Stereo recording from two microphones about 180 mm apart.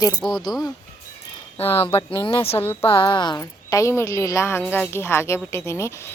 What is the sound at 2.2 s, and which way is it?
Speech, 25° left (ahead or behind).